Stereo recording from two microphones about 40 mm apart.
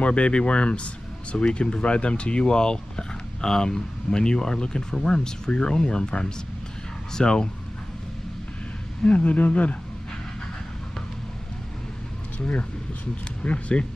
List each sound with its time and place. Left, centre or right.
0.0 s speech: left
9.0 s speech: left
13.4 s speech: left